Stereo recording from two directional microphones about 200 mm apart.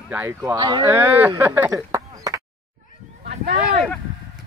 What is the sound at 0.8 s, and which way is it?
Speech, 10° right (ahead or behind).